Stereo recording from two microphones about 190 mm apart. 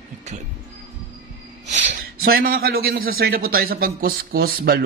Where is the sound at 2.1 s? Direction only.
50° right (ahead or behind).